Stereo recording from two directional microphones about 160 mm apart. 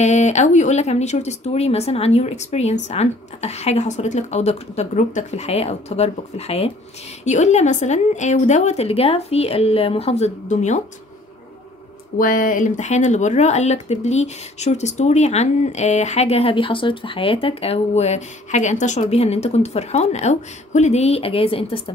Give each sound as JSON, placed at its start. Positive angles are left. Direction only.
{"t": 0.0, "sound": "speech", "side_deg": 45}
{"t": 12.2, "sound": "speech", "side_deg": 60}